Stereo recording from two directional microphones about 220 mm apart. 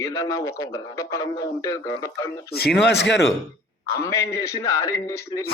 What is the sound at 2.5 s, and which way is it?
Speech, 45° left (ahead or behind).